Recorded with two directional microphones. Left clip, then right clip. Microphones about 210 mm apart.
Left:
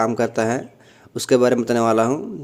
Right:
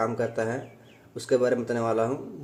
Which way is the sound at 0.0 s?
40° left (ahead or behind).